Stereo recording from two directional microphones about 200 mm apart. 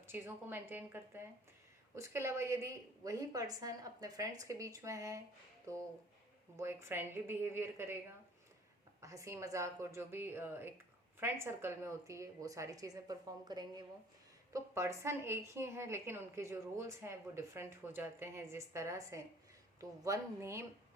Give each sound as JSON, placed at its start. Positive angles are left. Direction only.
{"t": 0.1, "sound": "a woman's voice", "side_deg": -10}
{"t": 6.6, "sound": "a woman's voice", "side_deg": -15}
{"t": 9.0, "sound": "a woman's voice", "side_deg": -15}